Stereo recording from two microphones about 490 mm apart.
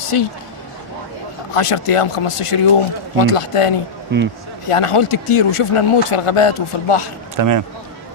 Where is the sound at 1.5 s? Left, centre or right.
Left.